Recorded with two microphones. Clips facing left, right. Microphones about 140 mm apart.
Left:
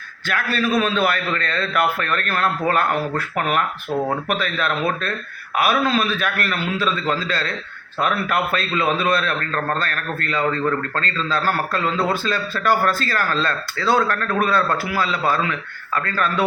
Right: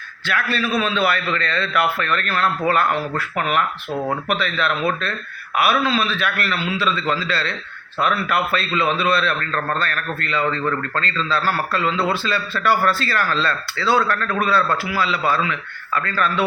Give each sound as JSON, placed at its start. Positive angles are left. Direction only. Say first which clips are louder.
{"t": 0.3, "sound": "a man's voice", "louder": "left 1 dB", "side_deg": 45}